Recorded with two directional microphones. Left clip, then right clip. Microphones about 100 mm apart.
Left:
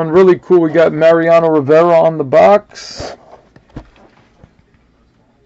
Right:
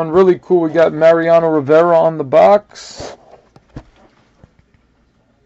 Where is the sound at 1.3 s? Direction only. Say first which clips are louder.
Left 2 dB; centre (ahead or behind).